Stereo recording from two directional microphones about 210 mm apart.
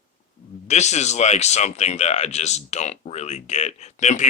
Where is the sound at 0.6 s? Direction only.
35° left (ahead or behind).